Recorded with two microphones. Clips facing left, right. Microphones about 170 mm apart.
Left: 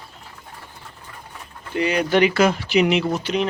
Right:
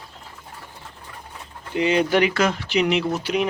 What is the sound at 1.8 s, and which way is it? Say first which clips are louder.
Speech: right 1 dB; 20° right (ahead or behind).